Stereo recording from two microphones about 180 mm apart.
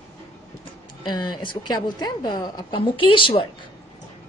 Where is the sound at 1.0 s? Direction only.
25° left (ahead or behind).